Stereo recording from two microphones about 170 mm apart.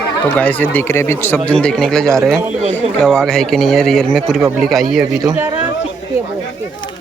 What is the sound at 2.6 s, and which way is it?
Speech, 40° right (ahead or behind).